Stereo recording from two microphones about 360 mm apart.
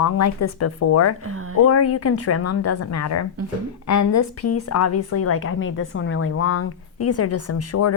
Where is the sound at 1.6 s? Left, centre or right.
Left.